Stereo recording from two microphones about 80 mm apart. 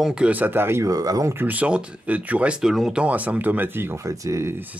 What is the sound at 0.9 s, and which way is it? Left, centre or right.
Speech, right.